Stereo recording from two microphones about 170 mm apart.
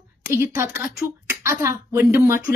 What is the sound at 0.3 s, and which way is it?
Speech, 15° right (ahead or behind).